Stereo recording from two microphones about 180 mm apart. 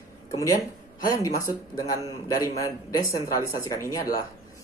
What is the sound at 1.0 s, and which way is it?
Speech, 20° left (ahead or behind).